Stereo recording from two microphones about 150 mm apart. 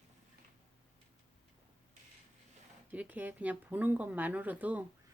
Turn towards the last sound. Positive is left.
turn(degrees=-10)  # may be behind; listen again after turning